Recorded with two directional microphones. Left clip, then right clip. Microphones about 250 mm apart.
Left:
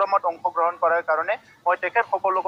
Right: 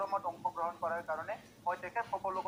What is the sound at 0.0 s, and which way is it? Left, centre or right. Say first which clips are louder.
Speech: left 14 dB; left.